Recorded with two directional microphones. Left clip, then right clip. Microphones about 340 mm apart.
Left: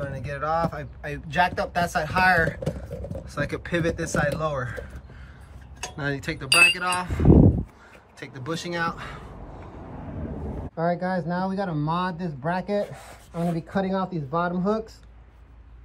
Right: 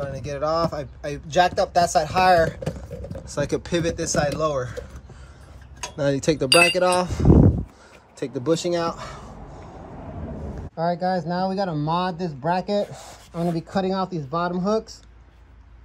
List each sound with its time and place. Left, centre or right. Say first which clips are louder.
0.0 s speech: right 4 dB; centre
5.8 s speech: right 6 dB; centre
7.2 s a sound: left 1 dB; centre
8.2 s speech: right 10 dB; centre
10.8 s speech: right 3 dB; centre